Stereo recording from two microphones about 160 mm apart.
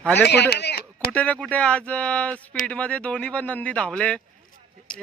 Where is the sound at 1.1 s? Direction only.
10° left (ahead or behind).